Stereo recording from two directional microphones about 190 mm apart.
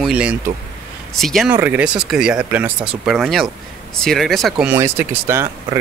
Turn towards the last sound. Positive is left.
turn(degrees=-15)  # may be behind; listen again after turning